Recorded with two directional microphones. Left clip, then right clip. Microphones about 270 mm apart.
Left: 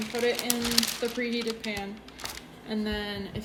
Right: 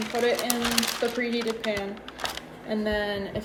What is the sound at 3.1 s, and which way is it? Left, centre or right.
Speech, centre.